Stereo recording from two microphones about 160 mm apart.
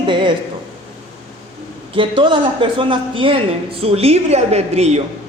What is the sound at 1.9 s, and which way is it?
Speech, 30° right (ahead or behind).